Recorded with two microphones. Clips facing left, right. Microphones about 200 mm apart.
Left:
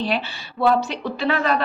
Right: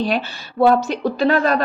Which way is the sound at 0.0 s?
45° right (ahead or behind).